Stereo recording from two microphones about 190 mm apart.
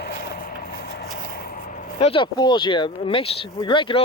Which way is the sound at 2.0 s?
25° left (ahead or behind).